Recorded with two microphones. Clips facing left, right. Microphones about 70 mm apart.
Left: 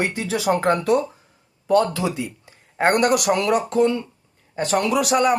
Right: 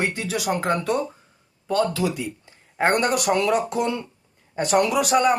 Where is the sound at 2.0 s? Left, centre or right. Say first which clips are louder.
Even; left.